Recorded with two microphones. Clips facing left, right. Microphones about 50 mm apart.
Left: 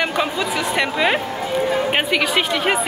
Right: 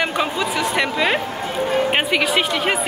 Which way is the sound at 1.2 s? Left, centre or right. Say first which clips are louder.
Left 2 dB; right.